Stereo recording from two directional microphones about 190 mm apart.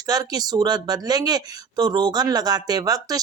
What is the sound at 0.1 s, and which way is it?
Speech, 20° right (ahead or behind).